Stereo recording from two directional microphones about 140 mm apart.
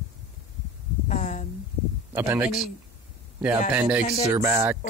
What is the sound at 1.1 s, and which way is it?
Speech, 60° left (ahead or behind).